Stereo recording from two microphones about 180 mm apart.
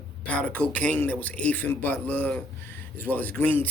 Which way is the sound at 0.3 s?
5° left (ahead or behind).